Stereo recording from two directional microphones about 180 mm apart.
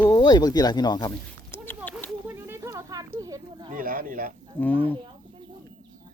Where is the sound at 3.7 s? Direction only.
50° right (ahead or behind).